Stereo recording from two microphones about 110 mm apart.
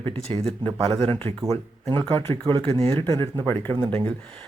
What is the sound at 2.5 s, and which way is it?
Speech, 50° right (ahead or behind).